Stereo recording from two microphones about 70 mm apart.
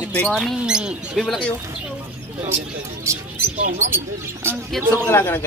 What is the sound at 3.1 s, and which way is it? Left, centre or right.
Speech, right.